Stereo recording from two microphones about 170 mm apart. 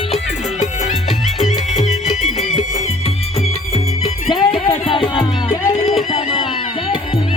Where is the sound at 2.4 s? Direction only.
45° left (ahead or behind); by 7.2 s 30° left (ahead or behind).